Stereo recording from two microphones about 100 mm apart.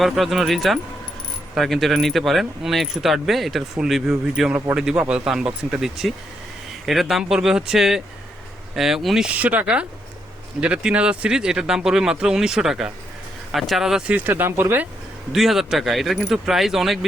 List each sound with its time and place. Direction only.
0.0 s speech: centre (ahead or behind)
9.3 s speech: 15° right (ahead or behind)
14.2 s speech: 20° right (ahead or behind)
15.3 s speech: centre (ahead or behind)